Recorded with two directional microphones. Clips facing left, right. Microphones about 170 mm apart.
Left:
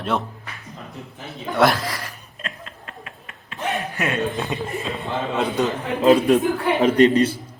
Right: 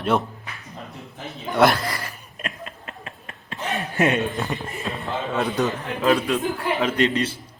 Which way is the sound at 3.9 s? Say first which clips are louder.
Right 5 dB; 20° right (ahead or behind).